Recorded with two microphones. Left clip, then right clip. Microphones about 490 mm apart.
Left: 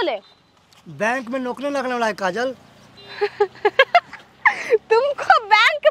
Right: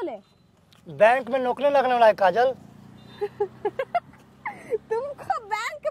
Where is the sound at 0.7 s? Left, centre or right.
Right.